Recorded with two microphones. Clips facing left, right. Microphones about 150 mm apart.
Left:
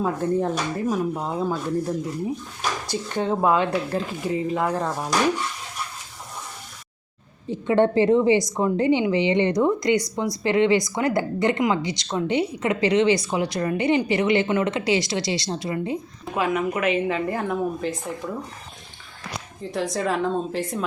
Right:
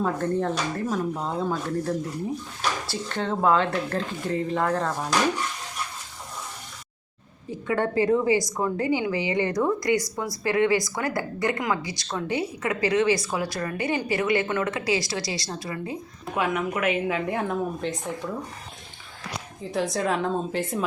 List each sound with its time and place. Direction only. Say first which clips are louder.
0.0 s speech: left 2 dB; 10° left (ahead or behind)
7.5 s a woman's voice: left 6 dB; 25° left (ahead or behind)
16.2 s a woman's voice: left 2 dB; centre (ahead or behind)
19.7 s a woman's voice: left 1 dB; centre (ahead or behind)